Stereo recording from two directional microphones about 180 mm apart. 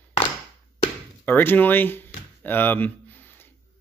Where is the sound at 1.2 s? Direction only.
10° left (ahead or behind).